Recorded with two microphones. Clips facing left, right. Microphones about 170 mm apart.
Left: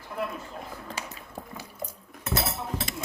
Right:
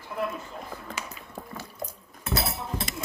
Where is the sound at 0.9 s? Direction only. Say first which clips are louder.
Even; 35° left (ahead or behind).